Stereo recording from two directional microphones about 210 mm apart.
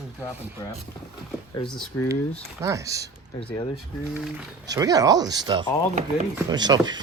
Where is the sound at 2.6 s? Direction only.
15° right (ahead or behind).